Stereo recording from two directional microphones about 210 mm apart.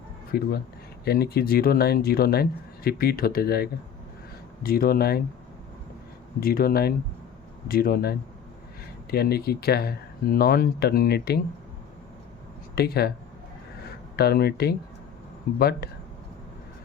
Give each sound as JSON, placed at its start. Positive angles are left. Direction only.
{"t": 0.3, "sound": "speech", "side_deg": 45}
{"t": 6.4, "sound": "speech", "side_deg": 45}
{"t": 12.7, "sound": "speech", "side_deg": 50}
{"t": 14.2, "sound": "speech", "side_deg": 50}